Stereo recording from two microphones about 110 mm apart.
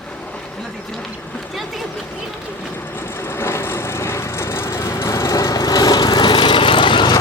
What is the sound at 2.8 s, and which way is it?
Vehicle, 20° left (ahead or behind).